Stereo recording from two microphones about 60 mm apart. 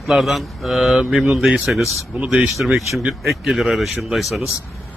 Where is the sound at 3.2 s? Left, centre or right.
Centre.